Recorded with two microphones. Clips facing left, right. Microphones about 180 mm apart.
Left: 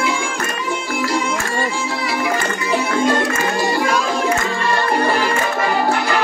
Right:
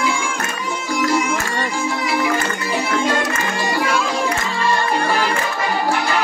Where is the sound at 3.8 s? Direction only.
40° left (ahead or behind).